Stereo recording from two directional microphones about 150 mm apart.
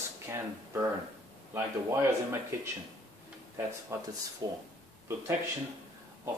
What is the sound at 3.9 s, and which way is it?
Speech, 20° right (ahead or behind).